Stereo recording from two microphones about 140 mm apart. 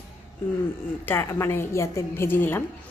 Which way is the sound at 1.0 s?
20° left (ahead or behind).